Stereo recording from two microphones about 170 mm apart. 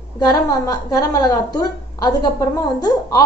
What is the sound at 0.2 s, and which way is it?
A woman's voice, 20° left (ahead or behind).